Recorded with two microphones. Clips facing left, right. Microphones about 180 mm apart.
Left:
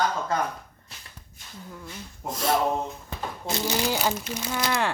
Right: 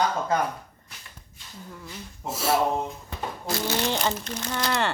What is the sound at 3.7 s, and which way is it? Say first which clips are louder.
Speech: left 1 dB; 5° left (ahead or behind).